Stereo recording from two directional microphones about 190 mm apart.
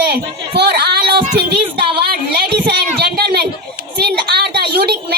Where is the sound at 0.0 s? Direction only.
60° right (ahead or behind).